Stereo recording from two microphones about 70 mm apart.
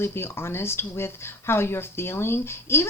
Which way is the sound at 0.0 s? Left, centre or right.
Left.